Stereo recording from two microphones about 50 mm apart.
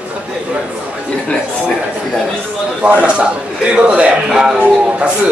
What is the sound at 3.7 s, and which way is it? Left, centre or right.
Speech, right.